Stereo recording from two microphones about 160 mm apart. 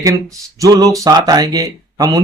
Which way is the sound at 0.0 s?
20° right (ahead or behind).